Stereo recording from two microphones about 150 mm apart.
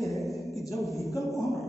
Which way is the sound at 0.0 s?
Centre (ahead or behind).